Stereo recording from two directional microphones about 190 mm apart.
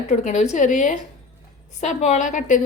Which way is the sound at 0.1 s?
35° left (ahead or behind).